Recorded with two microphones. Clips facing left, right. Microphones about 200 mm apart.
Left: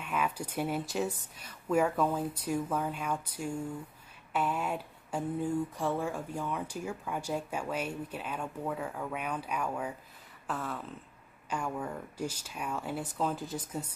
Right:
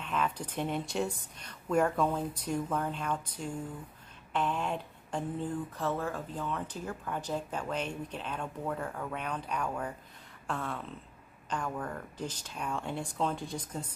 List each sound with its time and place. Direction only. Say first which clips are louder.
0.0 s speech: even; 10° left (ahead or behind)
10.4 s a sound: even; 5° left (ahead or behind)
11.5 s speech: left 1 dB; 10° left (ahead or behind)